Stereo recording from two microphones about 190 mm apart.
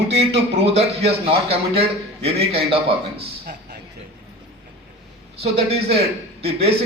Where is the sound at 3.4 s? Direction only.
50° right (ahead or behind).